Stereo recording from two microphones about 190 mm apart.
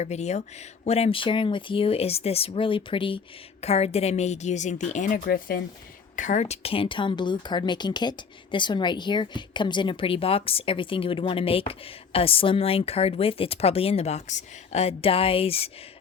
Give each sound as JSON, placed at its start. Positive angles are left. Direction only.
{"t": 0.0, "sound": "speech", "side_deg": 35}
{"t": 6.1, "sound": "speech", "side_deg": 40}